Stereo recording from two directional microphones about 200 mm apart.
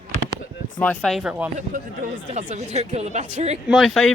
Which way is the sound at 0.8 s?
5° left (ahead or behind).